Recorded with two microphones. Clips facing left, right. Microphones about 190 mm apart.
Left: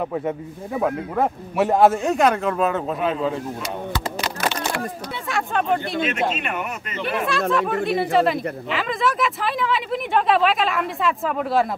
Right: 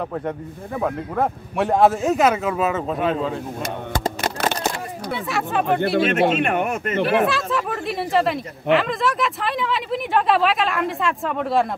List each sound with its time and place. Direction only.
0.7 s speech: 5° left (ahead or behind)
3.9 s a sound: 50° right (ahead or behind)
5.3 s speech: centre (ahead or behind)
6.0 s speech: 50° right (ahead or behind)
7.5 s speech: centre (ahead or behind)